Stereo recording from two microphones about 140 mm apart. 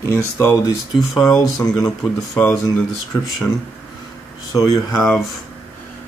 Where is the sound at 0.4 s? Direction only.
25° left (ahead or behind).